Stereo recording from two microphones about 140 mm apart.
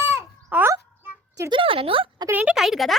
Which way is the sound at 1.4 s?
35° right (ahead or behind).